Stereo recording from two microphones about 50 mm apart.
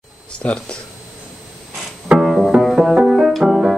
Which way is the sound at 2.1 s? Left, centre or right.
Centre.